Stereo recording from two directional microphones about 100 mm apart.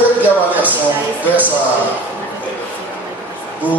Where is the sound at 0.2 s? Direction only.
15° right (ahead or behind).